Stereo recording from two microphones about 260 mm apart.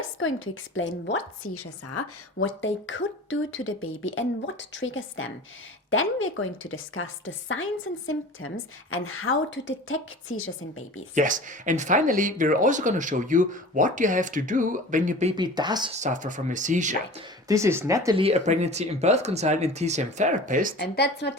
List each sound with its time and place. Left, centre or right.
0.2 s a woman's voice: left
1.9 s a woman's voice: left
11.1 s speech: right
17.5 s speech: centre; by 20.7 s right
20.7 s speech: left